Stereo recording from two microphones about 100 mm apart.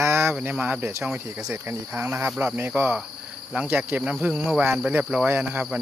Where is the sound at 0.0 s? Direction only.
25° right (ahead or behind).